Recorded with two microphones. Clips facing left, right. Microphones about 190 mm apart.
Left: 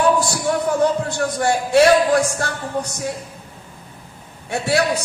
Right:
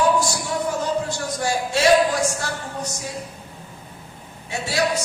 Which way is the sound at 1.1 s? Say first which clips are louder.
Left 5 dB; 60° left (ahead or behind).